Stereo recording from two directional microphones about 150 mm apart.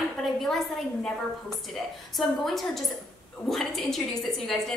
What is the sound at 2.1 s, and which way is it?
A woman's voice, centre (ahead or behind).